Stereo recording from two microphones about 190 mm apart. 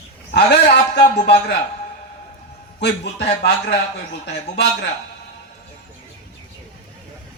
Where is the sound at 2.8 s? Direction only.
60° left (ahead or behind).